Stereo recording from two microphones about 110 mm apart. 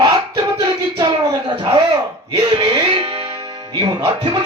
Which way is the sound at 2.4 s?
55° right (ahead or behind).